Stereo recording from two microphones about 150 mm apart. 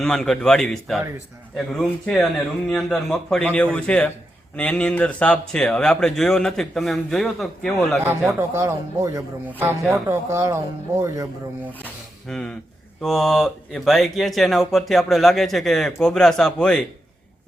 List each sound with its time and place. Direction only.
0.0 s a man's voice: 5° left (ahead or behind)
8.0 s speech: 15° right (ahead or behind)
12.3 s speech: 5° left (ahead or behind)